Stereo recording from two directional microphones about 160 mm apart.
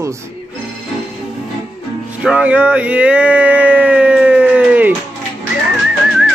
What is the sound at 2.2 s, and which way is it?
Speech, 5° right (ahead or behind).